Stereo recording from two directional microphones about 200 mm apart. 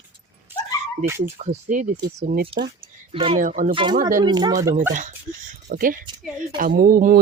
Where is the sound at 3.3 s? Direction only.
40° right (ahead or behind).